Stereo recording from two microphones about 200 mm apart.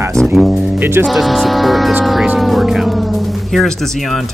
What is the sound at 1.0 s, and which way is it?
Speech, centre (ahead or behind).